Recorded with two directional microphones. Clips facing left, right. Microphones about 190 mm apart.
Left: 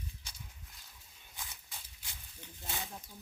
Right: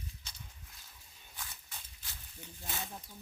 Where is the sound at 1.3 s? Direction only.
15° left (ahead or behind).